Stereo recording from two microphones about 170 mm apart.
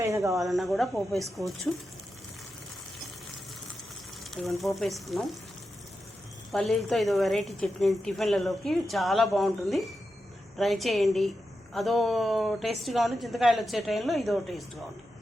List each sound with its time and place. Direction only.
0.0 s speech: 15° right (ahead or behind)
0.3 s a woman's voice: centre (ahead or behind)
4.6 s a woman's voice: centre (ahead or behind)
6.5 s a woman's voice: centre (ahead or behind)